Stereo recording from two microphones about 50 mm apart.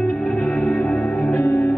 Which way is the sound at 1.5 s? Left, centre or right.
Left.